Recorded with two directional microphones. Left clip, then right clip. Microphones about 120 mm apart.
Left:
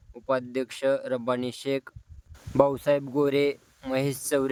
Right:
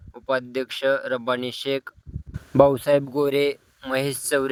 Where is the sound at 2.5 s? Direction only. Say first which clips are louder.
Right 5 dB; 40° right (ahead or behind).